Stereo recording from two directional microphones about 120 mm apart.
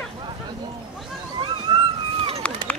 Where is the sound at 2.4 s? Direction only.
10° left (ahead or behind).